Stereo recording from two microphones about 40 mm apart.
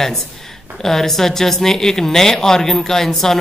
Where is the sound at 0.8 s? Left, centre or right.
Centre.